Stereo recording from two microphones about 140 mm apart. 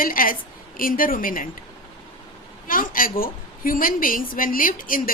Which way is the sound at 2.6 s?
80° left.